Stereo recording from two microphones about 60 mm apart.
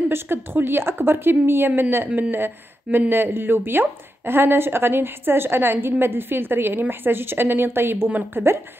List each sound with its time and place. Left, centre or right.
0.1 s speech: right
2.0 s speech: right
2.3 s speech: right